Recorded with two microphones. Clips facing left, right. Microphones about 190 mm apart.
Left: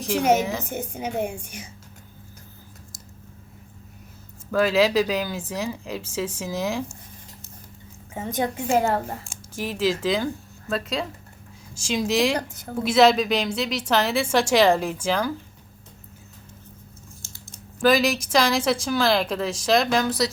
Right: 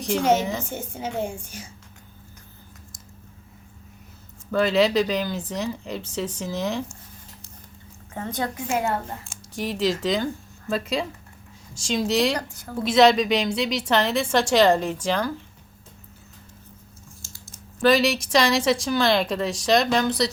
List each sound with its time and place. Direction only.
0.2 s a woman's voice: 10° left (ahead or behind)
4.5 s a woman's voice: 5° left (ahead or behind)
8.1 s a woman's voice: 15° left (ahead or behind)
9.6 s a woman's voice: 5° left (ahead or behind)
17.7 s a woman's voice: 5° left (ahead or behind)